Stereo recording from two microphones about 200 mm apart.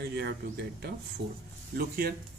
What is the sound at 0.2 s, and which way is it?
A man's voice, 55° right (ahead or behind).